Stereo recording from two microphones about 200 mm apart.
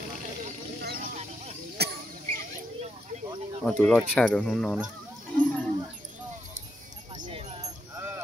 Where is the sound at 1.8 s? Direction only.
55° right (ahead or behind).